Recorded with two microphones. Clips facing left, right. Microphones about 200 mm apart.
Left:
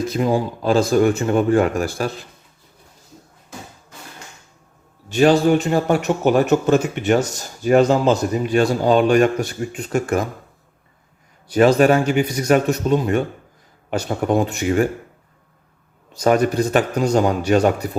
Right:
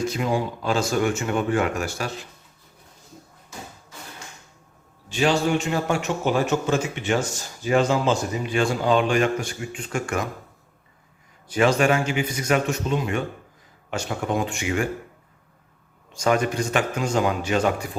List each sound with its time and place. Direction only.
0.2 s speech: 35° left (ahead or behind)
5.1 s speech: 45° left (ahead or behind)
5.9 s speech: 55° left (ahead or behind)
7.0 s speech: 40° left (ahead or behind)
11.8 s speech: 35° left (ahead or behind)
16.2 s speech: 40° left (ahead or behind)